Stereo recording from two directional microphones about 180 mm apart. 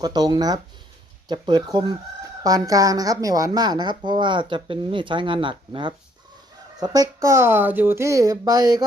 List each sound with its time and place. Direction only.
0.0 s a woman's voice: 20° right (ahead or behind)